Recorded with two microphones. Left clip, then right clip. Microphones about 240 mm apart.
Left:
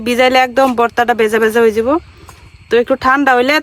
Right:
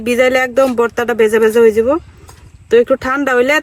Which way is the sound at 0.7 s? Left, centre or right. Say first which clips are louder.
Left 2 dB; centre.